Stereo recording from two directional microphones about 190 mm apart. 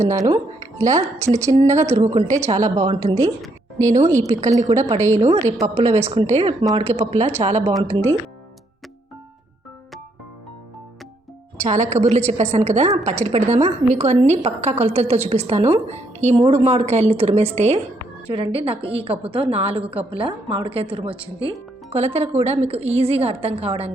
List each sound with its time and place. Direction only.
0.0 s speech: 15° right (ahead or behind)
2.7 s a woman's voice: 25° right (ahead or behind)
3.8 s a woman's voice: 40° right (ahead or behind)
4.0 s speech: 15° right (ahead or behind)
5.2 s a woman's voice: 35° right (ahead or behind)
11.5 s a woman's voice: 40° right (ahead or behind)